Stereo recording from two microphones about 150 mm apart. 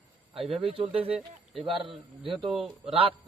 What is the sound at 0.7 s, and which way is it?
A man's voice, 40° right (ahead or behind).